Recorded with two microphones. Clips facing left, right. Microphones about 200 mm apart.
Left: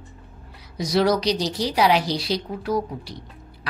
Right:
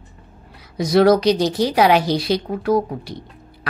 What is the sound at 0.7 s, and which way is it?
A woman's voice, 55° right (ahead or behind).